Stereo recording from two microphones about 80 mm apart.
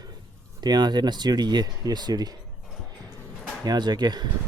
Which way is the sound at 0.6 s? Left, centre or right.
Right.